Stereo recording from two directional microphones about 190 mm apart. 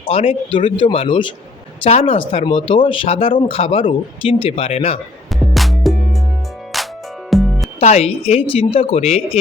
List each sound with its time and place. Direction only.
0.0 s speech: 30° left (ahead or behind)
5.3 s music: centre (ahead or behind)
7.8 s speech: 35° left (ahead or behind)